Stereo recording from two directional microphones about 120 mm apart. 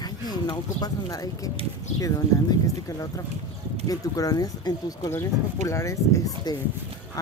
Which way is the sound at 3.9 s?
30° left (ahead or behind).